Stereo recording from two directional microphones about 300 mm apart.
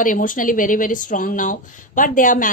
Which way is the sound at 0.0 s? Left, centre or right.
Left.